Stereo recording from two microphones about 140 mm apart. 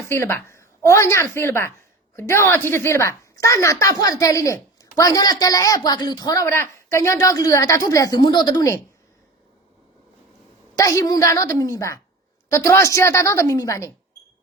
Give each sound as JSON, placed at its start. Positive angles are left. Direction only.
{"t": 0.0, "sound": "a woman's voice", "side_deg": 15}
{"t": 10.8, "sound": "a woman's voice", "side_deg": 25}